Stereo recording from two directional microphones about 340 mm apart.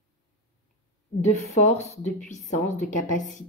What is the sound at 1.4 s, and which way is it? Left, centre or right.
Speech, centre.